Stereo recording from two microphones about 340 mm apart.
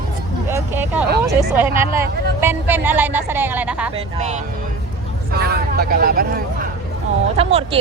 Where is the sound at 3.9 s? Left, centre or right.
Centre.